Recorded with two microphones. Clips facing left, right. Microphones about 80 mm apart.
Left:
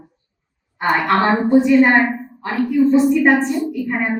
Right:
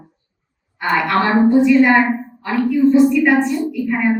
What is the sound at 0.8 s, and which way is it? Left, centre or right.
Speech, left.